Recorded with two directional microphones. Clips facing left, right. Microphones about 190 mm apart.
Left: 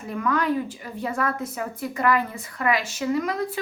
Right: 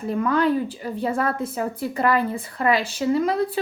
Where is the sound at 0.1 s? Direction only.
30° right (ahead or behind).